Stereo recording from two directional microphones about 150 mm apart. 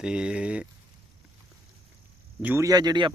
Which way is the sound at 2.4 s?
15° right (ahead or behind).